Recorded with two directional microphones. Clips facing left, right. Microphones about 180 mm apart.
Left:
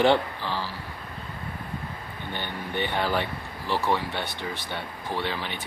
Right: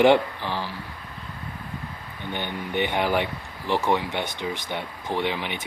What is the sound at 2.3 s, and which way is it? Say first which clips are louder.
Speech: right 4 dB; 15° right (ahead or behind).